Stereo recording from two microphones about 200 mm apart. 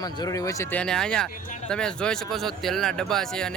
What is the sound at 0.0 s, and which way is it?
Speech, 20° left (ahead or behind).